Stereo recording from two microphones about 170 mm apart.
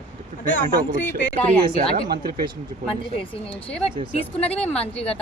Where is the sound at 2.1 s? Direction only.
60° right (ahead or behind).